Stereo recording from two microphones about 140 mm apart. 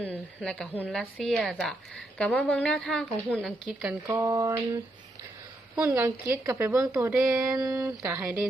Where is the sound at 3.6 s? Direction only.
10° right (ahead or behind).